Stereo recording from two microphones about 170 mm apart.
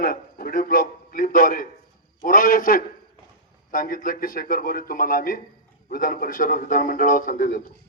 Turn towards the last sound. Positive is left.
turn(degrees=55)  # may be behind; listen again after turning